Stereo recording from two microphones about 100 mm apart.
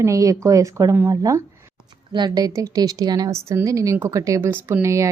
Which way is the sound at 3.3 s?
30° right (ahead or behind).